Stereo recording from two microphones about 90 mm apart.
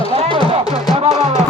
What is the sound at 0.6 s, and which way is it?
Music, 50° left (ahead or behind).